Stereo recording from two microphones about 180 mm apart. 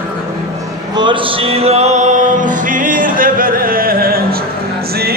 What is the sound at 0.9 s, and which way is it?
Music, 25° right (ahead or behind).